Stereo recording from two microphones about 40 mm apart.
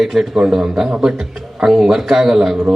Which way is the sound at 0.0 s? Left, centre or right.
Centre.